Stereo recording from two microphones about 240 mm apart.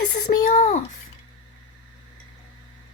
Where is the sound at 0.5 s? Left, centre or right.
Left.